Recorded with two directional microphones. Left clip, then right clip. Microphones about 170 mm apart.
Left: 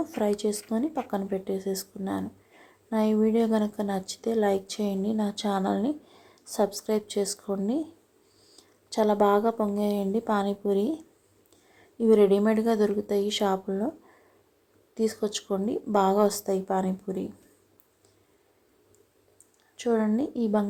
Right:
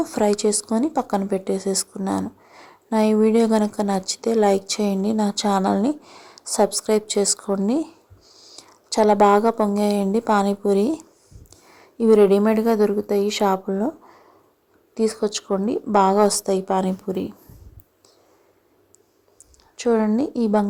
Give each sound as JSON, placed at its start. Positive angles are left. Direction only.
{"t": 0.0, "sound": "a woman's voice", "side_deg": -20}
{"t": 14.9, "sound": "a woman's voice", "side_deg": -15}
{"t": 19.7, "sound": "speech", "side_deg": -15}